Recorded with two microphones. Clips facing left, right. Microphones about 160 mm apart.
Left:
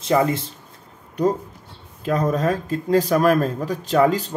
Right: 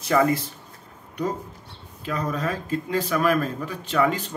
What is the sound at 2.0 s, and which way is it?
Speech, 40° left (ahead or behind).